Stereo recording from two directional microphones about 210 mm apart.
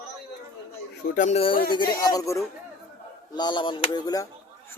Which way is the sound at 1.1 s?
30° left (ahead or behind).